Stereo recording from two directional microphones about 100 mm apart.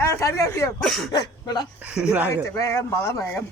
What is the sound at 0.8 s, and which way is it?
Speech, 5° left (ahead or behind).